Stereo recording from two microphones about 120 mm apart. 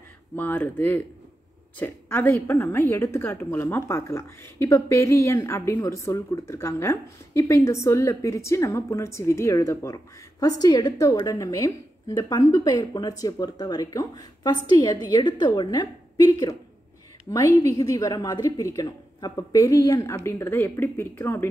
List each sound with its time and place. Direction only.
0.4 s a woman's voice: 15° left (ahead or behind); by 16.5 s 30° left (ahead or behind)
17.6 s a woman's voice: 25° left (ahead or behind)